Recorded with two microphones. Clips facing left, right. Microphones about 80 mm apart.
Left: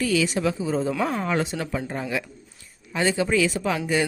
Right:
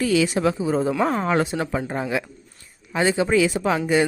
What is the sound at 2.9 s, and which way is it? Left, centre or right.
Speech, right.